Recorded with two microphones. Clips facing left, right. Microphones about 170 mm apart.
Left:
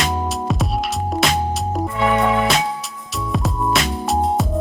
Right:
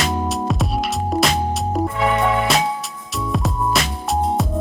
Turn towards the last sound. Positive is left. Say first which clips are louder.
# left 1 dB
turn(degrees=0)  # may be behind; listen again after turning